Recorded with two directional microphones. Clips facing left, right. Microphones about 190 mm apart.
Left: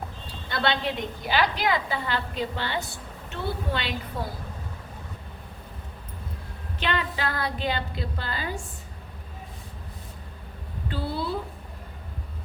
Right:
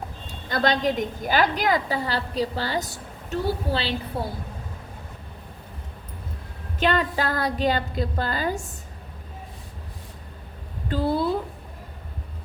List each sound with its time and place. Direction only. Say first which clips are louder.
0.3 s a woman's voice: right 4 dB; 40° right (ahead or behind)
6.7 s a woman's voice: right 6 dB; 45° right (ahead or behind)
10.8 s a sound: right 7 dB; 45° right (ahead or behind)